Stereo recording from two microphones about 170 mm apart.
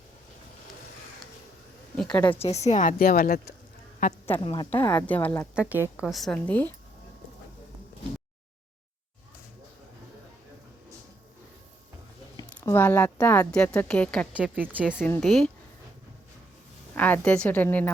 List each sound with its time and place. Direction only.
2.0 s a woman's voice: 10° left (ahead or behind)
2.4 s speech: 40° left (ahead or behind); by 3.5 s 65° left (ahead or behind)
4.0 s speech: 50° left (ahead or behind)
4.4 s speech: 25° left (ahead or behind)
4.7 s a woman's voice: 10° left (ahead or behind)
5.5 s speech: 10° right (ahead or behind)
6.1 s a woman's voice: centre (ahead or behind)
12.5 s a woman's voice: 10° left (ahead or behind)
14.3 s speech: 10° right (ahead or behind)
14.9 s a woman's voice: 10° left (ahead or behind)
15.2 s speech: centre (ahead or behind)
16.9 s a woman's voice: 10° left (ahead or behind)